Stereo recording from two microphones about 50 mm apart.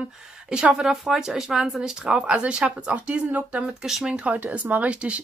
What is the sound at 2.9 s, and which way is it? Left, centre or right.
Speech, right.